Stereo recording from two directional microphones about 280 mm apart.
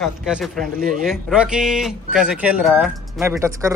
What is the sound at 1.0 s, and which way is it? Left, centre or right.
A man's voice, centre.